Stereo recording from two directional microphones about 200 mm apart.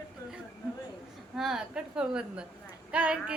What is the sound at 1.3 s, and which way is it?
A woman's voice, centre (ahead or behind).